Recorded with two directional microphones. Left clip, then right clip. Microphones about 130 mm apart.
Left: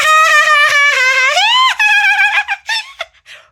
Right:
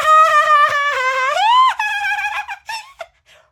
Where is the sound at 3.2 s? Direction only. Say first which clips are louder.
Left 12 dB; 5° left (ahead or behind).